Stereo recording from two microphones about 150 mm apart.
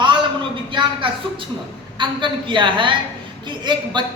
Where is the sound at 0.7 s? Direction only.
30° right (ahead or behind).